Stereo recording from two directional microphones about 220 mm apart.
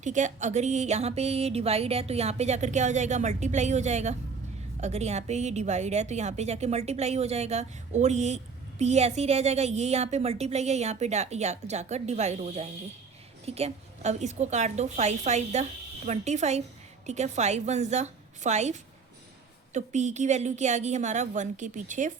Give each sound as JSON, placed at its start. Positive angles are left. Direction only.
{"t": 0.0, "sound": "a woman's voice", "side_deg": -35}